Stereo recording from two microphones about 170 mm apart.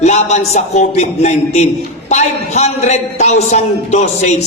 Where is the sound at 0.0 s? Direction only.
40° left (ahead or behind).